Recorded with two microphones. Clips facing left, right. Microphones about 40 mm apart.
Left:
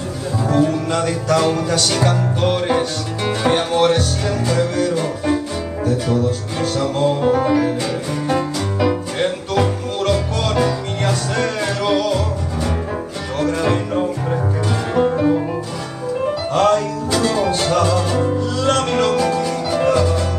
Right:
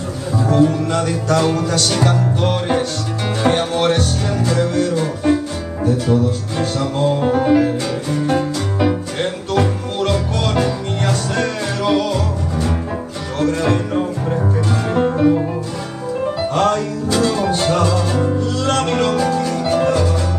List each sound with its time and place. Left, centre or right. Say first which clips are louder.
0.4 s music: right 2 dB; centre
9.5 s music: even; centre
13.4 s music: right 1 dB; centre
15.1 s music: right 2 dB; centre
16.3 s music: left 1 dB; centre